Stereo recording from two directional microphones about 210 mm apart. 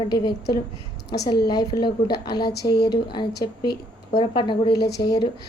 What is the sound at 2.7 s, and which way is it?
Speech, 50° left (ahead or behind).